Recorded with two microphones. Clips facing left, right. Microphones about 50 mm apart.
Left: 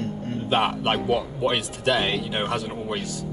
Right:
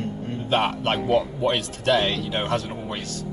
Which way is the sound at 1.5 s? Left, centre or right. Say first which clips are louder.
Right 3 dB; centre.